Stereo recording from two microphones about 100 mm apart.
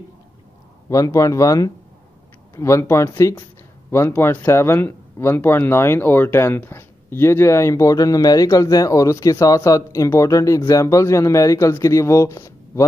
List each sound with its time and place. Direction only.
0.8 s speech: 35° left (ahead or behind)